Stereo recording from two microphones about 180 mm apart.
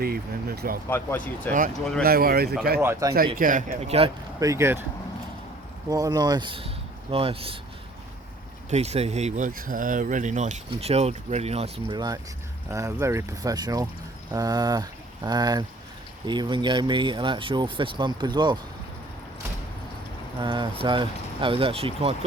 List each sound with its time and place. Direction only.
0.0 s speech: 55° right (ahead or behind)
0.9 s speech: 10° left (ahead or behind)
2.0 s speech: 55° right (ahead or behind)
2.8 s speech: 15° right (ahead or behind)
3.3 s speech: 50° right (ahead or behind)
4.4 s speech: 15° right (ahead or behind)
5.9 s speech: 20° right (ahead or behind)
8.7 s speech: 35° right (ahead or behind)
11.9 s speech: 20° right (ahead or behind)
20.4 s speech: 25° right (ahead or behind)